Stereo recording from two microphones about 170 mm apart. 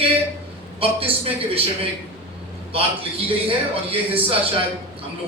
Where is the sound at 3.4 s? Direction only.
35° right (ahead or behind).